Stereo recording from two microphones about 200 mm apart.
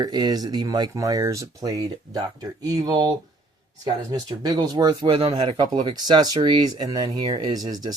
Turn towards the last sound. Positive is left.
turn(degrees=-20)  # may be behind; listen again after turning